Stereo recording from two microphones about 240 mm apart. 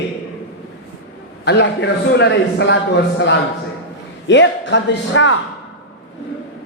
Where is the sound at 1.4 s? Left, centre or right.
Left.